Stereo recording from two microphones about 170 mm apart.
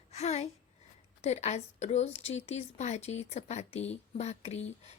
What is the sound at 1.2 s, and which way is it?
A woman's voice, 40° left (ahead or behind).